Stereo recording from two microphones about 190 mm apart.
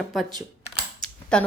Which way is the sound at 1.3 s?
5° left (ahead or behind).